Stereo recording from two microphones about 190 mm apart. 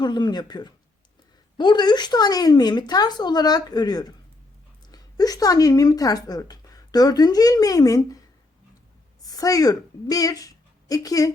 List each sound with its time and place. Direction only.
0.0 s speech: 25° left (ahead or behind)
9.2 s a woman's voice: 20° left (ahead or behind)